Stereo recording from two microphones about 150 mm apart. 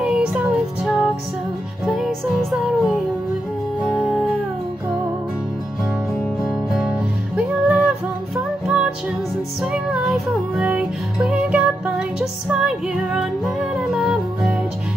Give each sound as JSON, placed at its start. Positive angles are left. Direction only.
{"t": 0.0, "sound": "music", "side_deg": -5}
{"t": 6.1, "sound": "music", "side_deg": 0}